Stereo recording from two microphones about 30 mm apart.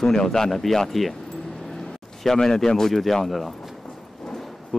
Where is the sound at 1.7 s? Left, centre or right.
Centre.